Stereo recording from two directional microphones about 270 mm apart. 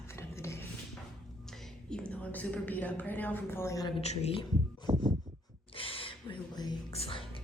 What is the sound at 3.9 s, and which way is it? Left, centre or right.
Speech, left.